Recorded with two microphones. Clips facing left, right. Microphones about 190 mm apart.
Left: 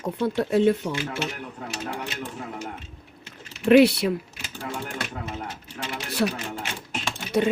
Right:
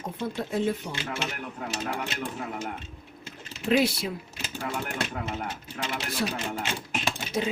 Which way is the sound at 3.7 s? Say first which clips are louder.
Left 8 dB; 65° left (ahead or behind).